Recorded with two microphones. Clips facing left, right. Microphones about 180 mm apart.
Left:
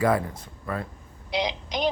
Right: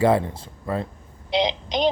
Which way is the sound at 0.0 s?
25° right (ahead or behind).